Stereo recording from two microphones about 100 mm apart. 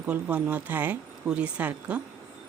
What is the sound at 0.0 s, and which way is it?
Speech, 15° right (ahead or behind).